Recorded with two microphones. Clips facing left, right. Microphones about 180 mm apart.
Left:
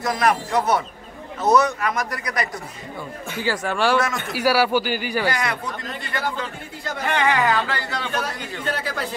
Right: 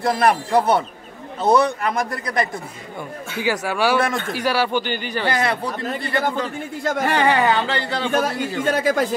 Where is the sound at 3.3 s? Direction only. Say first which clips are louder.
Right 2 dB; 15° right (ahead or behind).